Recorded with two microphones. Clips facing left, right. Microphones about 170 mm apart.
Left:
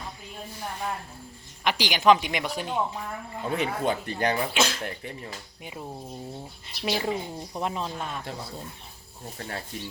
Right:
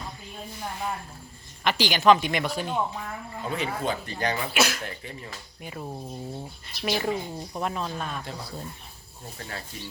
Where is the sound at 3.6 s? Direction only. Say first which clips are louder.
Left 2 dB; 55° left (ahead or behind).